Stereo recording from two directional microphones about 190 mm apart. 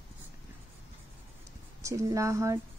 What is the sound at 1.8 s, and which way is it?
Speech, 15° right (ahead or behind).